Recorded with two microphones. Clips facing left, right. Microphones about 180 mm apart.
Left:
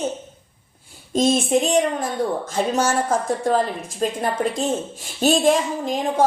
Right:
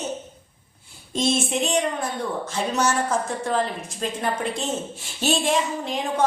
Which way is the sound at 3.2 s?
35° left (ahead or behind).